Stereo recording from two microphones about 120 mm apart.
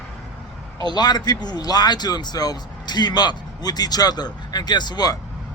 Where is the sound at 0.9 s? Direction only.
35° left (ahead or behind).